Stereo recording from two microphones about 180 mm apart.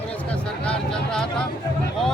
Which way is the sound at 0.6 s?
5° left (ahead or behind).